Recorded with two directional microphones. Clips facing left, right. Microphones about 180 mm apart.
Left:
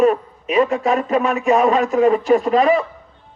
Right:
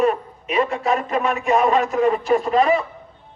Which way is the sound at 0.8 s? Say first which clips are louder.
Left 3 dB; 35° right (ahead or behind).